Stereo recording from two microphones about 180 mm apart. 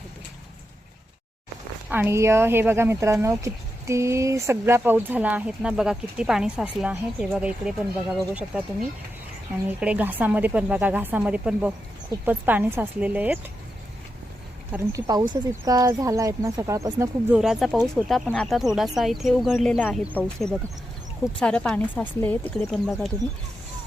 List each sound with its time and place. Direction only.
1.9 s speech: 10° right (ahead or behind)
9.8 s speech: 10° right (ahead or behind)
14.7 s speech: 15° right (ahead or behind)
17.3 s speech: centre (ahead or behind)